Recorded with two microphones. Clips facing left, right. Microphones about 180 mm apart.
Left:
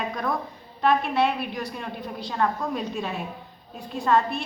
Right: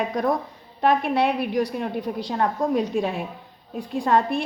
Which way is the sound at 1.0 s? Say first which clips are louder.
Right 2 dB; 60° right (ahead or behind).